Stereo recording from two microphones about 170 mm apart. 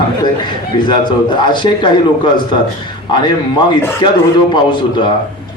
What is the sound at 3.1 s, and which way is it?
Speech, 25° left (ahead or behind).